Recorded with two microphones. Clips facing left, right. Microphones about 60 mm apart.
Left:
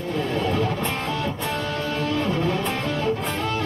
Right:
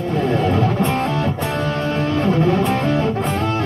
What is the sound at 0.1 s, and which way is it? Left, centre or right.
Music, right.